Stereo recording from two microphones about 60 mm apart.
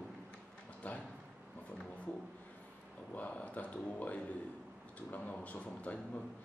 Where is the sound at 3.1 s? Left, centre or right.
Left.